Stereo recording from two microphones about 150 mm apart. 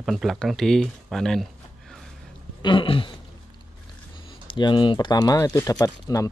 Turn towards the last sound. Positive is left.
turn(degrees=25)  # may be behind; listen again after turning